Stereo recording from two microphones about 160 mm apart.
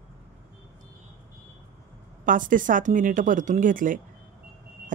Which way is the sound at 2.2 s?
55° right (ahead or behind).